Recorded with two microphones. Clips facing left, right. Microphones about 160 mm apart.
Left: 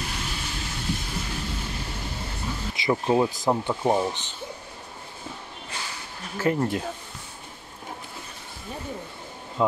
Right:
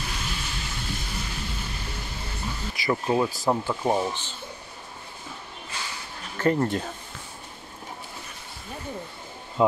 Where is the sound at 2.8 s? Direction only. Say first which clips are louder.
Left 2 dB; 20° left (ahead or behind).